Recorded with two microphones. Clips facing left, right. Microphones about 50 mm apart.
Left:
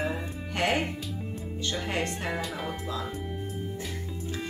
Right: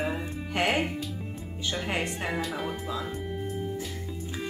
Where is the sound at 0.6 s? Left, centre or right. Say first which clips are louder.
Right 1 dB; centre.